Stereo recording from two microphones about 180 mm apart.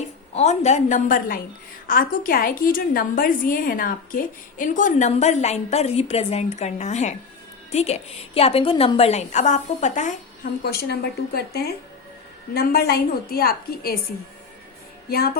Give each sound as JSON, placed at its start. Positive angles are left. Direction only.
{"t": 0.0, "sound": "a woman's voice", "side_deg": 40}
{"t": 10.6, "sound": "a woman's voice", "side_deg": 60}